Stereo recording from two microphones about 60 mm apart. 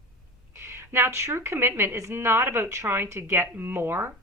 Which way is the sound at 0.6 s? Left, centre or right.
Right.